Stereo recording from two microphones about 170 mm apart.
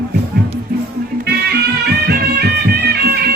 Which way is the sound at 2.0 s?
75° right (ahead or behind).